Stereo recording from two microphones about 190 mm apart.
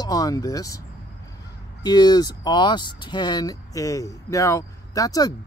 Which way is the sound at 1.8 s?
20° left (ahead or behind).